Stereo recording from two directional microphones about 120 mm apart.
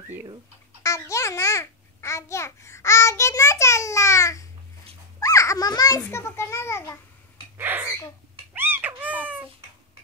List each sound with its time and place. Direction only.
0.8 s a child's voice: 25° left (ahead or behind)
5.2 s children playing: 25° left (ahead or behind)
6.0 s a child's voice: 20° left (ahead or behind)
7.5 s hiccup: 15° right (ahead or behind)
8.5 s cat: 15° right (ahead or behind)